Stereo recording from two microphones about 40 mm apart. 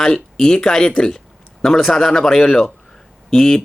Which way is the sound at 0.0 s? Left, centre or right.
Centre.